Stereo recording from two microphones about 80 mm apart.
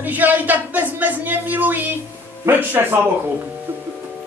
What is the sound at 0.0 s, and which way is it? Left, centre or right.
A man's voice, right.